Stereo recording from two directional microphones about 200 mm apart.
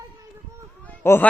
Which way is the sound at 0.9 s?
10° left (ahead or behind).